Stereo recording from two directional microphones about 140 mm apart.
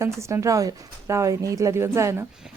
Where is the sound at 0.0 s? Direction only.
20° right (ahead or behind).